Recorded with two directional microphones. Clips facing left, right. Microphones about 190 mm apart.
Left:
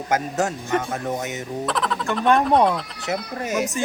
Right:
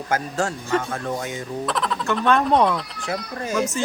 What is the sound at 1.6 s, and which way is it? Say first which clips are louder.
Speech: left 1 dB; centre (ahead or behind).